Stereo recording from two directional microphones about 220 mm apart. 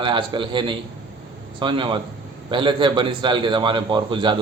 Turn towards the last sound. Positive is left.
turn(degrees=-20)  # may be behind; listen again after turning